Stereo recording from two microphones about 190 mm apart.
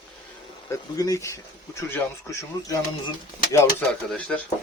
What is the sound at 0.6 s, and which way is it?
Speech, 15° left (ahead or behind).